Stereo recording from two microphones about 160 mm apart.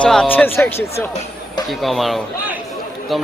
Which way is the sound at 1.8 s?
Centre (ahead or behind).